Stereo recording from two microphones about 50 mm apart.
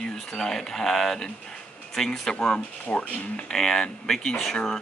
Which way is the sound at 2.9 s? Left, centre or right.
Left.